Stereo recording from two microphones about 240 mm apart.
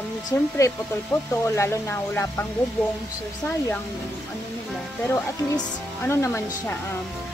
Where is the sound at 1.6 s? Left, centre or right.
Centre.